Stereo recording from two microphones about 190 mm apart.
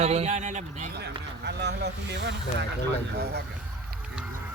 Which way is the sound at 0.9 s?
60° right (ahead or behind).